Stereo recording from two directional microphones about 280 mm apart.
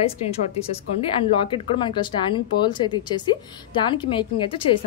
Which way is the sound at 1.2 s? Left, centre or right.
Centre.